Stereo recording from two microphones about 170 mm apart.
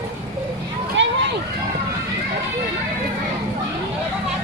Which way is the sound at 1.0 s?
90° right.